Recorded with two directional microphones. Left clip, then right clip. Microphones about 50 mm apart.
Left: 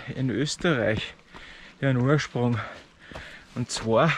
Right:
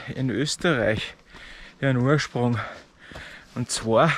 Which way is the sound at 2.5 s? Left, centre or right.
Centre.